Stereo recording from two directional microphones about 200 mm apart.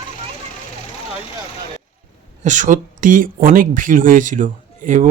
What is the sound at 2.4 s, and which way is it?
Speech, 40° right (ahead or behind).